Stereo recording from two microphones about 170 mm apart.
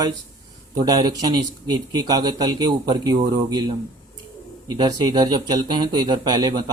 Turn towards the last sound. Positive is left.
turn(degrees=-25)  # may be behind; listen again after turning